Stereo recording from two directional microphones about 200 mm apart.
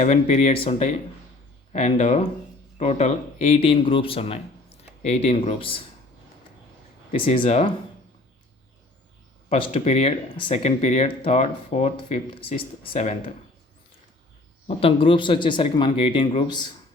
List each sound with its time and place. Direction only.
0.0 s speech: 35° left (ahead or behind)
7.1 s speech: 30° left (ahead or behind)
9.5 s speech: 30° left (ahead or behind)
14.7 s speech: 30° left (ahead or behind)